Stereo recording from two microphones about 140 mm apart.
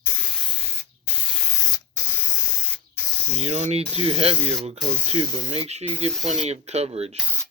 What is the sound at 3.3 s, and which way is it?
Speech, 50° right (ahead or behind).